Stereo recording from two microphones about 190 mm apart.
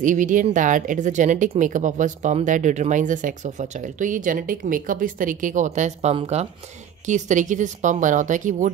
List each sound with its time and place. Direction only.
0.0 s speech: 40° right (ahead or behind)